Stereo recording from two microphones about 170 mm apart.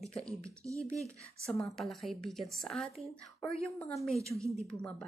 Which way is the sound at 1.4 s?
Centre (ahead or behind).